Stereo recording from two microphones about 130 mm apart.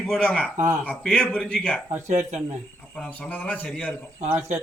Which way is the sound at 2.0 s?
65° right (ahead or behind).